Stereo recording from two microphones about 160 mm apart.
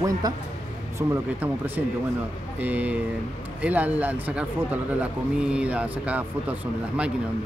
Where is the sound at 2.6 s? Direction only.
10° right (ahead or behind).